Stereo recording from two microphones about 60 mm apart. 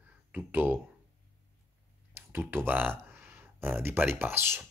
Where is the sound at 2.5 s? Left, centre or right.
Right.